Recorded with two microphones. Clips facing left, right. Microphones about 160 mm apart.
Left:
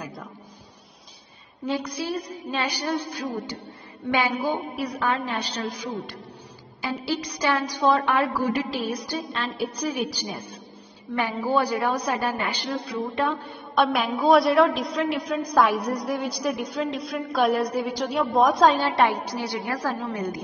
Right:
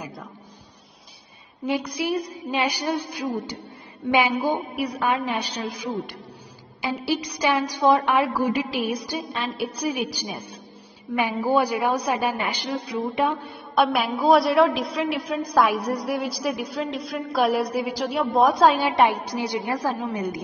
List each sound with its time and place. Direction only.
1.7 s a woman's voice: 10° right (ahead or behind)
18.7 s a woman's voice: 15° right (ahead or behind)